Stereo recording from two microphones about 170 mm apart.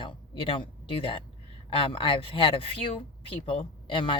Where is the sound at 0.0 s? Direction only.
30° left (ahead or behind).